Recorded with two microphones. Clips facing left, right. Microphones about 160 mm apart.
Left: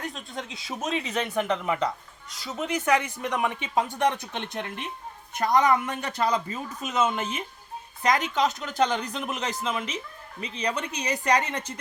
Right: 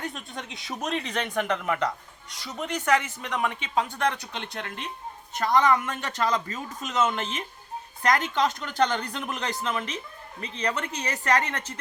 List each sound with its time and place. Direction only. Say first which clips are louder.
0.0 s speech: left 1 dB; centre (ahead or behind)